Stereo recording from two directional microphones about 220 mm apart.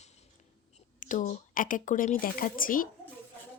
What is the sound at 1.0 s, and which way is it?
Speech, 35° left (ahead or behind).